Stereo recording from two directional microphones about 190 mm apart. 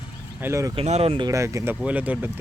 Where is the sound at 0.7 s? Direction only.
30° right (ahead or behind); by 2.4 s 10° right (ahead or behind).